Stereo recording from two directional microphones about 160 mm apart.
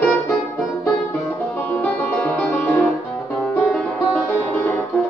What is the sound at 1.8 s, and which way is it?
Music, 5° left (ahead or behind).